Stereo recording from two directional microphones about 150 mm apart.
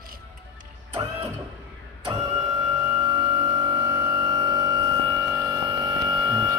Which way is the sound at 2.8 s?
25° right (ahead or behind).